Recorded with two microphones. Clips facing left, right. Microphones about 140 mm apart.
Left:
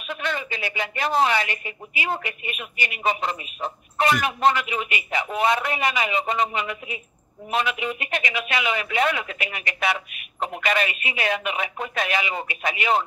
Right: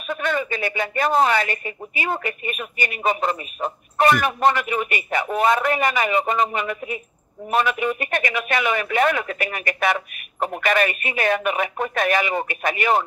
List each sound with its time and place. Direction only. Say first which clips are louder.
0.1 s speech: right 5 dB; 50° right (ahead or behind)